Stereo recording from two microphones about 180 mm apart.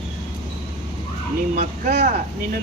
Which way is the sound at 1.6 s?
55° right (ahead or behind).